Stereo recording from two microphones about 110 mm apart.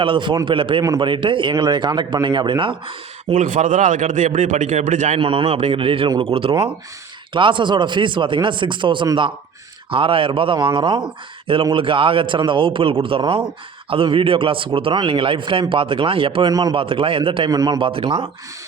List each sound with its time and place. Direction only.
0.0 s a man's voice: 50° right (ahead or behind)
0.8 s a man's voice: 40° right (ahead or behind)
3.6 s a man's voice: 90° right
5.2 s a man's voice: 55° right (ahead or behind)
7.3 s a man's voice: 50° right (ahead or behind)
16.5 s speech: 35° right (ahead or behind)
16.7 s a man's voice: 55° right (ahead or behind)
17.5 s speech: 35° right (ahead or behind)
17.7 s a man's voice: 55° right (ahead or behind)